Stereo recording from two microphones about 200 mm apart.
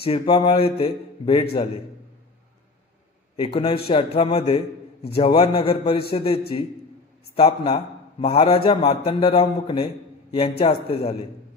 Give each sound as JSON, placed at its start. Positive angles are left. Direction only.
{"t": 0.0, "sound": "a man's voice", "side_deg": 25}
{"t": 3.3, "sound": "a man's voice", "side_deg": 25}